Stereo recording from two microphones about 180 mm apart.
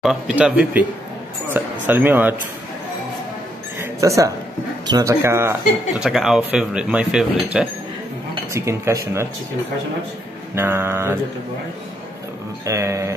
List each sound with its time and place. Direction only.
0.0 s speech: 5° right (ahead or behind)
3.8 s a sound: 15° right (ahead or behind)
4.8 s speech: 20° right (ahead or behind)
6.0 s speech: centre (ahead or behind)
10.5 s speech: 15° right (ahead or behind)
12.6 s speech: 15° right (ahead or behind)